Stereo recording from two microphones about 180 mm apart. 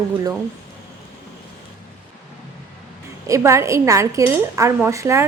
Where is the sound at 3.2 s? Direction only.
15° right (ahead or behind).